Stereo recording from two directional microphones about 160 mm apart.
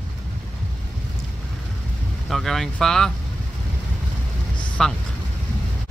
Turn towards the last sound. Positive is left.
turn(degrees=5)  # may be behind; listen again after turning